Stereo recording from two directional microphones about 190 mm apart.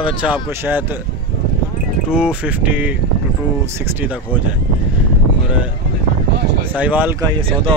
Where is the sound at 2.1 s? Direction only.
5° right (ahead or behind).